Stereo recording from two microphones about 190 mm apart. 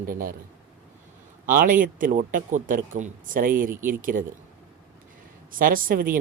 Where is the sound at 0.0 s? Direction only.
50° right (ahead or behind).